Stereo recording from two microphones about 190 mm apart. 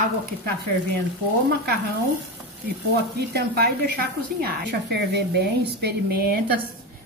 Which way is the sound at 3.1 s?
55° right (ahead or behind).